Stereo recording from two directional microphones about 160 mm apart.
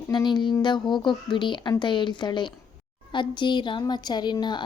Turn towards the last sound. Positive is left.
turn(degrees=30)  # may be behind; listen again after turning